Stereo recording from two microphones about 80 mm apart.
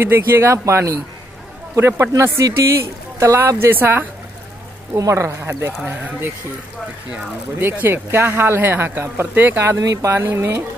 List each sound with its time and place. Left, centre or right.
0.0 s speech: right
4.9 s speech: right
5.4 s speech: right
7.1 s speech: right